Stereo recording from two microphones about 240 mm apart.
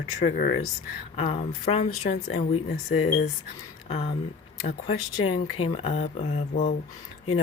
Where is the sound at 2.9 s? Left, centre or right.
Left.